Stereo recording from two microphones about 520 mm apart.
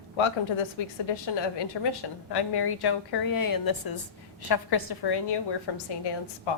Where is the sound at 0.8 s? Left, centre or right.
Left.